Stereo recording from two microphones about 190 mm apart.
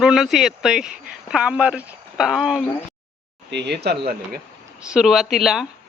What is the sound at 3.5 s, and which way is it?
Speech, 60° right (ahead or behind).